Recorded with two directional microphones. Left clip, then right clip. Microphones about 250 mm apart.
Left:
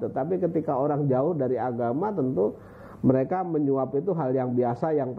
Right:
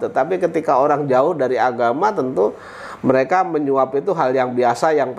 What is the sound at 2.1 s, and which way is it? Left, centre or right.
Speech, right.